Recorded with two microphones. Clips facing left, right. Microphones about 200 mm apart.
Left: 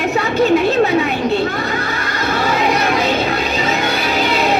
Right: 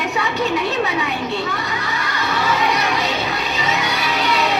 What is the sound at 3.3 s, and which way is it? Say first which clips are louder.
Music: left 5 dB; 45° left (ahead or behind).